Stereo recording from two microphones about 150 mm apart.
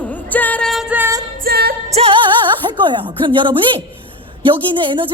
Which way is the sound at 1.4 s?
90° right.